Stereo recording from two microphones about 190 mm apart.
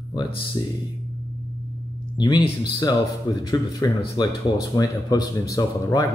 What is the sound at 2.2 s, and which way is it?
Speech, 20° left (ahead or behind).